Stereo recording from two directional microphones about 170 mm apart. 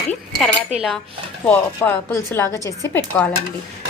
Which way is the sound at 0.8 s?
Centre (ahead or behind).